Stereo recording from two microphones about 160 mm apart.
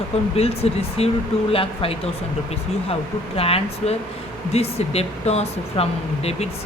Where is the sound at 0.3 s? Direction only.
40° left (ahead or behind).